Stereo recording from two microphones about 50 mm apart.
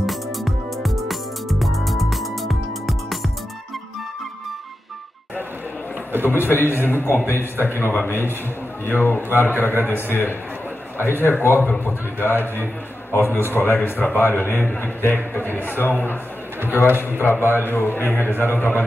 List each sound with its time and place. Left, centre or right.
0.0 s music: centre
6.2 s a man's voice: left
16.8 s a man's voice: right
17.2 s a man's voice: left